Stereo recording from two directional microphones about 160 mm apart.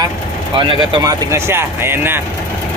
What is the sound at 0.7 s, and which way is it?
Speech, 30° right (ahead or behind).